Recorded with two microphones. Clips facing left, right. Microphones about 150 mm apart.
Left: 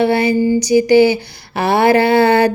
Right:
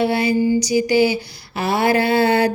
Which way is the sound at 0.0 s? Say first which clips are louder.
Left 4 dB; 60° left (ahead or behind).